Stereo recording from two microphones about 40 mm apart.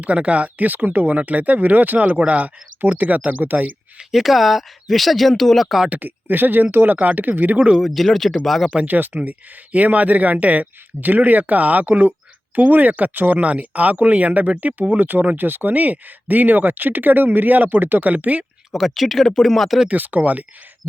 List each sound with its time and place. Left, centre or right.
0.0 s speech: right
2.0 s speech: right
2.8 s speech: right
4.1 s speech: centre
5.9 s speech: right
7.8 s speech: centre
8.9 s speech: right
9.7 s speech: right
15.4 s speech: right
18.7 s speech: centre
20.0 s speech: right